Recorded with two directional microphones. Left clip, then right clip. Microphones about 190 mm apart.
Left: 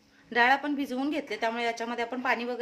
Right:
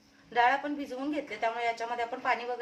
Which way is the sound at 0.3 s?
55° left (ahead or behind).